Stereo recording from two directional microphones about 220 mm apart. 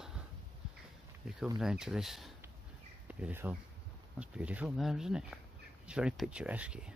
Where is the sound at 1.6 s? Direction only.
5° right (ahead or behind).